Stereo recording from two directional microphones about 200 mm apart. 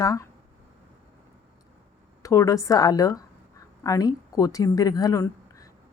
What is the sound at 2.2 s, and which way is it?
A woman's voice, 15° left (ahead or behind).